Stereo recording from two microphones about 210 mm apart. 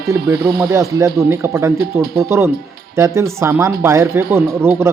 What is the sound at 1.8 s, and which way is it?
Speech, 45° right (ahead or behind).